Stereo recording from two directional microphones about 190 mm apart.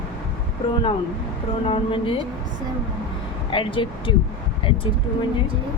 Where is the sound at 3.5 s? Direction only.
25° left (ahead or behind).